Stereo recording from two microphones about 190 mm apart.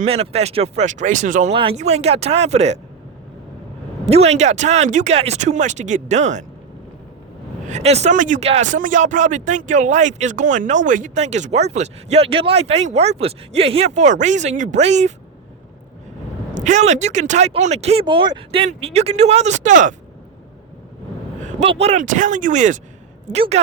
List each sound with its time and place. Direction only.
0.0 s speech: 30° right (ahead or behind)
4.0 s speech: 35° right (ahead or behind)
7.7 s speech: 35° right (ahead or behind)
16.6 s speech: 40° right (ahead or behind)
21.4 s speech: 35° right (ahead or behind)